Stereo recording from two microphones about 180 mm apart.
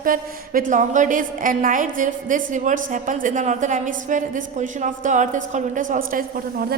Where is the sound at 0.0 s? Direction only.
50° right (ahead or behind).